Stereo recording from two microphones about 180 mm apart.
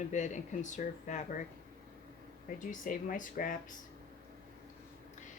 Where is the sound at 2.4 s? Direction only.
50° left (ahead or behind).